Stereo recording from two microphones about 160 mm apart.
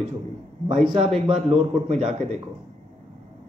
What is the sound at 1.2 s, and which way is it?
Speech, 35° right (ahead or behind).